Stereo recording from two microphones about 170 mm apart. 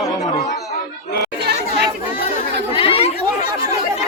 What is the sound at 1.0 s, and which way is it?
Chatter, 65° left (ahead or behind).